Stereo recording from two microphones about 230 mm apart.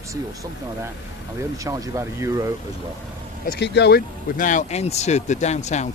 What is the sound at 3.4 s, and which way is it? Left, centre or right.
Speech, left.